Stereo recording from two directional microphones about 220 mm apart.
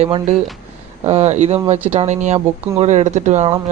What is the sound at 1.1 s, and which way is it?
Speech, 30° right (ahead or behind).